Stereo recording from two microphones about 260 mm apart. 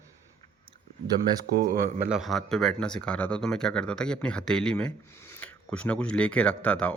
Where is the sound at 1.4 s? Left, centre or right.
Right.